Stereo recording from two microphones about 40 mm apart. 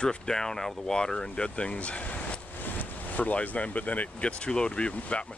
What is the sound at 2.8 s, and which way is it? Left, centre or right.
Vehicle, left.